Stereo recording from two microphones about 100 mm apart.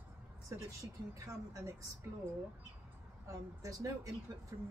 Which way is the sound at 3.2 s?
35° right (ahead or behind).